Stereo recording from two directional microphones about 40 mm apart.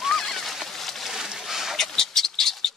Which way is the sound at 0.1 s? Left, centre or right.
Centre.